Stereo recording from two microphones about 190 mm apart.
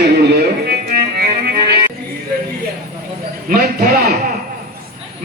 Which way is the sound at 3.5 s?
50° right (ahead or behind).